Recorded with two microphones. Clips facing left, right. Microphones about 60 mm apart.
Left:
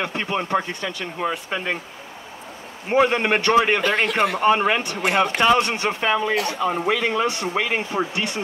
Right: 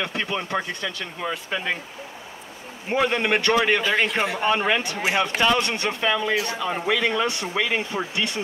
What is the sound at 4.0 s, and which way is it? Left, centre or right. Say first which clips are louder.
Speech: left 3 dB; left.